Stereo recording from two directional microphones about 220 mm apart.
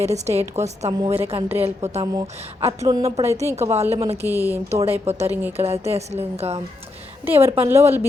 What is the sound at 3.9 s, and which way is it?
Speech, 25° right (ahead or behind).